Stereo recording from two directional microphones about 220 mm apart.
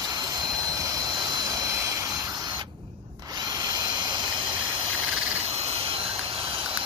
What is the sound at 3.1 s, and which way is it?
Drill, 15° right (ahead or behind).